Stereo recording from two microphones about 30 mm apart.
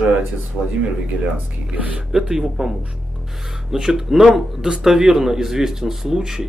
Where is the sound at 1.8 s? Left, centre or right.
Right.